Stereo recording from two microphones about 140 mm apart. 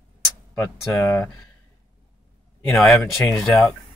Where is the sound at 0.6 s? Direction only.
20° left (ahead or behind).